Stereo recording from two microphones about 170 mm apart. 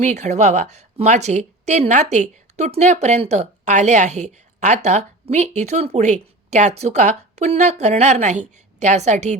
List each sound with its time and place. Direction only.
0.0 s a woman's voice: 40° right (ahead or behind)